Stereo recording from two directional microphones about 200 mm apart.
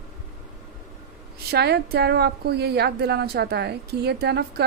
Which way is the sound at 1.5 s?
55° right (ahead or behind).